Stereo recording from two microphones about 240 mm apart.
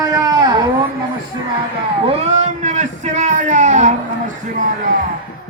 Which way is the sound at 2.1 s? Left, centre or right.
Right.